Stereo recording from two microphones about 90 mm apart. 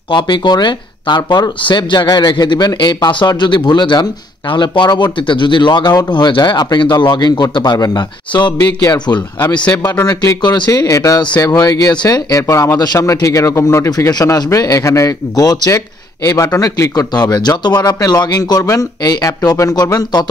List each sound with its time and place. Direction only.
0.1 s speech: 60° left (ahead or behind); by 11.1 s 35° left (ahead or behind)
11.1 s speech: 50° left (ahead or behind); by 12.7 s 35° left (ahead or behind)
12.7 s speech: 50° left (ahead or behind)
13.0 s a man's voice: 40° left (ahead or behind)
13.8 s a man's voice: 45° left (ahead or behind)